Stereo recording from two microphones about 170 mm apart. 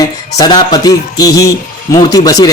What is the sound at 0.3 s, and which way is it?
Speech, 25° left (ahead or behind).